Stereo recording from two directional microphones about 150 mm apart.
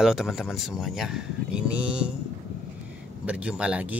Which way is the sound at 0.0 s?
Centre (ahead or behind).